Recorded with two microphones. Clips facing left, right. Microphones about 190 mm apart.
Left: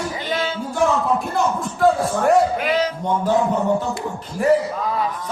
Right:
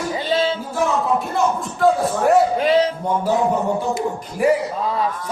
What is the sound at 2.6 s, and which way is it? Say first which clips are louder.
Speech: right 4 dB; 30° right (ahead or behind).